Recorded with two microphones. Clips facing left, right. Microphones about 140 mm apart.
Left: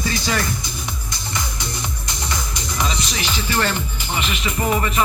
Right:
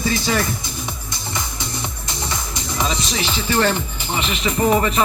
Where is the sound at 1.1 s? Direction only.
25° right (ahead or behind).